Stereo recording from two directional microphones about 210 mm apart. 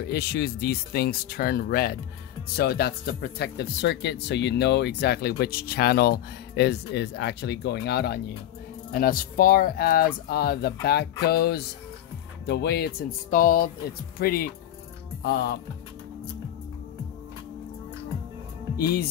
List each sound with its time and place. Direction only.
0.1 s speech: 50° left (ahead or behind)